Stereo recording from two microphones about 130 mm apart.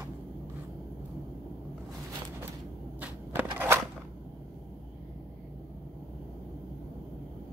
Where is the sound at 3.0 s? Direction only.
10° right (ahead or behind).